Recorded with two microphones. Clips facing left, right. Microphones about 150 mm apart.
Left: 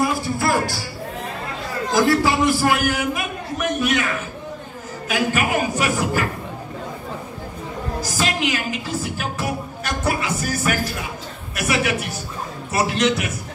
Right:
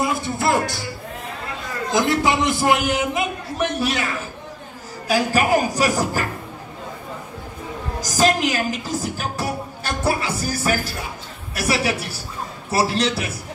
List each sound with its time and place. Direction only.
0.0 s music: 20° right (ahead or behind)
2.0 s a man's voice: 20° right (ahead or behind)
5.0 s a woman's voice: 35° right (ahead or behind)
8.0 s a woman's voice: 40° right (ahead or behind)